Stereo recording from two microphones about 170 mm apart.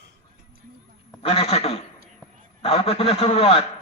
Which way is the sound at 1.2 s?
35° left (ahead or behind).